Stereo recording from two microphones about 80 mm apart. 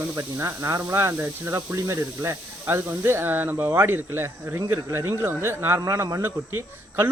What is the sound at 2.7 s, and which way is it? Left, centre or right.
Speech, right.